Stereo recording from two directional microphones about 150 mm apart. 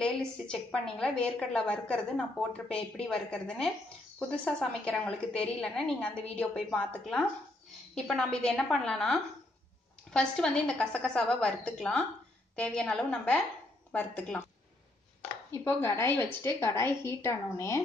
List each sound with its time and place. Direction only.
0.0 s a woman's voice: 5° left (ahead or behind)
15.5 s a woman's voice: 15° left (ahead or behind)